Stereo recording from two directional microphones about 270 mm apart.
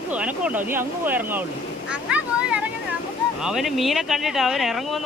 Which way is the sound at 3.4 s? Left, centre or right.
Centre.